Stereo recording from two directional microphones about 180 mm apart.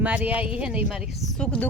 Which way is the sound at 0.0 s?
10° right (ahead or behind).